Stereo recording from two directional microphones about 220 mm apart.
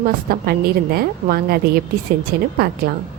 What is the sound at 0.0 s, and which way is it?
A woman's voice, 45° right (ahead or behind).